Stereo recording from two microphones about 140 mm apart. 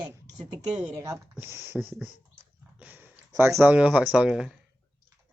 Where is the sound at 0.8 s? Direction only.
20° right (ahead or behind).